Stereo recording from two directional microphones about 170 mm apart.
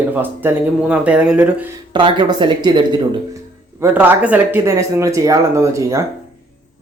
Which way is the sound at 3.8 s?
10° right (ahead or behind).